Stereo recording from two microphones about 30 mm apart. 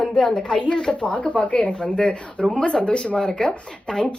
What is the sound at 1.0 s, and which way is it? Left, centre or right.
A woman's voice, left.